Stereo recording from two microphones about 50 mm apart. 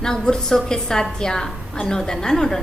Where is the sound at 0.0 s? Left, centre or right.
Centre.